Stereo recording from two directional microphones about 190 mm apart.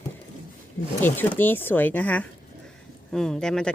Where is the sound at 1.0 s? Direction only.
10° left (ahead or behind).